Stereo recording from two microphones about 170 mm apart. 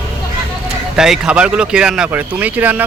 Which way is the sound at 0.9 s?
5° right (ahead or behind).